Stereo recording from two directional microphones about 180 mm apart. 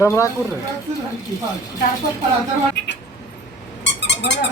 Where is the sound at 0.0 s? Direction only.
15° left (ahead or behind).